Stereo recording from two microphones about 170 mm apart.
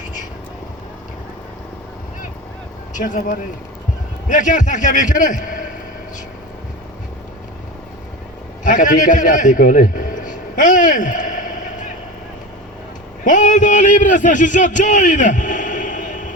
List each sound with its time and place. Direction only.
2.9 s a man's voice: 45° left (ahead or behind)
8.6 s a man's voice: 50° left (ahead or behind)
13.2 s a man's voice: 50° left (ahead or behind)